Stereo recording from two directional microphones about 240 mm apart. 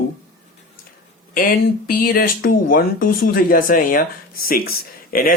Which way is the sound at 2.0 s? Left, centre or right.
Left.